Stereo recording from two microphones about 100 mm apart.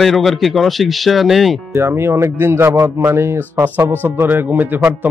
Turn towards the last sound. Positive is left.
turn(degrees=-20)  # may be behind; listen again after turning